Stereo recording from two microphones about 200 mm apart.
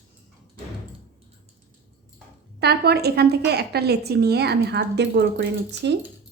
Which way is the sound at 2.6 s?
55° right (ahead or behind).